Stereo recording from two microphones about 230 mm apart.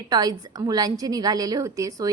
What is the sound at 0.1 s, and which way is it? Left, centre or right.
A woman's voice, centre.